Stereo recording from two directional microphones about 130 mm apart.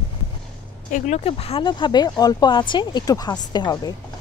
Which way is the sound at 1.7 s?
35° left (ahead or behind).